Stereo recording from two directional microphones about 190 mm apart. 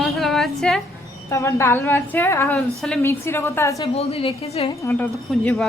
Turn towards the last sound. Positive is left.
turn(degrees=10)  # may be behind; listen again after turning